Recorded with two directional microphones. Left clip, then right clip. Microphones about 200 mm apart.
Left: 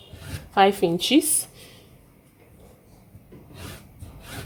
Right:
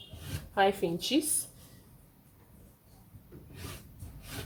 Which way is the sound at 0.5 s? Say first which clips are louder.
Left 9 dB; 55° left (ahead or behind).